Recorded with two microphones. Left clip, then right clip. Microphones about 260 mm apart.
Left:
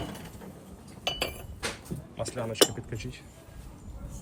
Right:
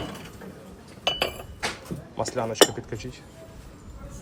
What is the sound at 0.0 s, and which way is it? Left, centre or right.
Mechanisms, centre.